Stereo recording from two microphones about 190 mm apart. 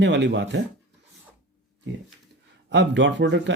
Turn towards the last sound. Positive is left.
turn(degrees=-70)  # may be behind; listen again after turning